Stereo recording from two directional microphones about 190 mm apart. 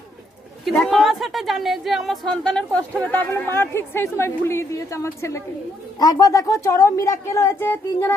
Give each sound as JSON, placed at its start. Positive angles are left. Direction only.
{"t": 0.6, "sound": "a woman's voice", "side_deg": 0}